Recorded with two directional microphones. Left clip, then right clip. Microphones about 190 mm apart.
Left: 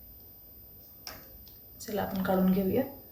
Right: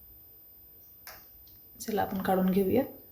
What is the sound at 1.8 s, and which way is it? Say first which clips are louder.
Speech: right 2 dB; 50° right (ahead or behind).